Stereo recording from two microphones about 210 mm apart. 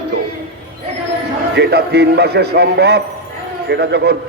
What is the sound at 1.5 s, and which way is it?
A man's voice, 50° right (ahead or behind).